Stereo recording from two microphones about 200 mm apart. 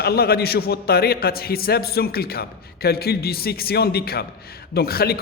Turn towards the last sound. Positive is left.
turn(degrees=50)  # may be behind; listen again after turning